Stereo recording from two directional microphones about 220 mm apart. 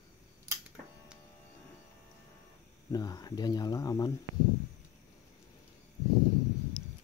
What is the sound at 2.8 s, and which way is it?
Speech, 15° left (ahead or behind).